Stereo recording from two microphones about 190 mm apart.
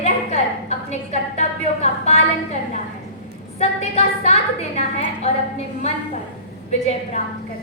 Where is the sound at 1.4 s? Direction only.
35° left (ahead or behind).